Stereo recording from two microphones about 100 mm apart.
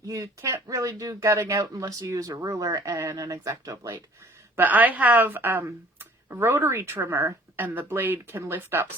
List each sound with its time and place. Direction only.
0.1 s speech: 35° right (ahead or behind)
4.5 s speech: 15° right (ahead or behind)